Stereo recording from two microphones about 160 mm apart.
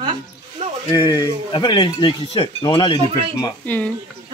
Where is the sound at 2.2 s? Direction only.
40° left (ahead or behind).